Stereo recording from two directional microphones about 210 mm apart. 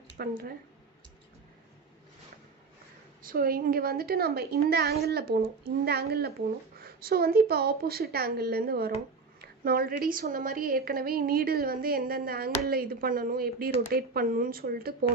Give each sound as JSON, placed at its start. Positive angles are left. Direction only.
{"t": 0.2, "sound": "a woman's voice", "side_deg": -45}
{"t": 3.2, "sound": "a woman's voice", "side_deg": -45}